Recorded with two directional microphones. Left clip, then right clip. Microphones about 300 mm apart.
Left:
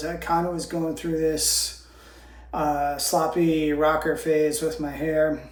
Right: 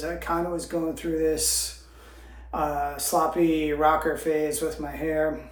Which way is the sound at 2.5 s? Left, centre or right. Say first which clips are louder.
Left 3 dB; centre.